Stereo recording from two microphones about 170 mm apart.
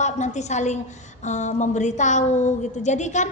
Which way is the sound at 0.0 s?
45° left (ahead or behind).